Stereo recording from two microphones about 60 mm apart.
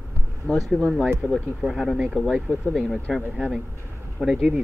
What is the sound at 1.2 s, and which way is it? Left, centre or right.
Speech, left.